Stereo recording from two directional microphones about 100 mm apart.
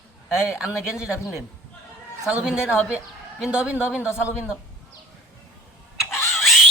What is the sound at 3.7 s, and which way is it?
Speech, 20° left (ahead or behind).